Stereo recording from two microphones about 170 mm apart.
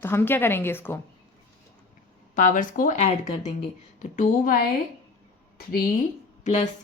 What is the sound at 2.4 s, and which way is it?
Speech, 50° left (ahead or behind).